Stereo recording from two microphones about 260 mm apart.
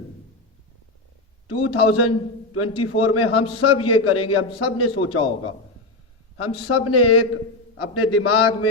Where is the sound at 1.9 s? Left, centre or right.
Left.